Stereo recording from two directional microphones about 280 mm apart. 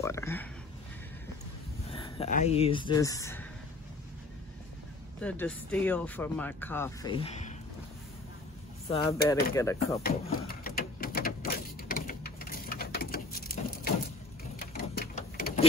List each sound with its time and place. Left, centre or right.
0.0 s a sound: centre
1.9 s speech: left
5.2 s speech: centre; by 7.5 s left
8.8 s speech: left
9.6 s speech: centre
10.2 s a sound: left